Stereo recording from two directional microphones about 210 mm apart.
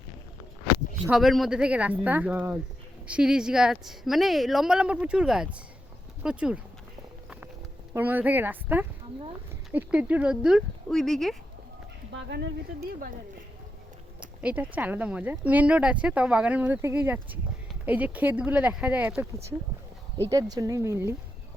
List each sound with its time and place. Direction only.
1.0 s a woman's voice: centre (ahead or behind)
7.9 s a woman's voice: 10° right (ahead or behind)
12.1 s speech: 60° right (ahead or behind)
14.2 s speech: 5° right (ahead or behind)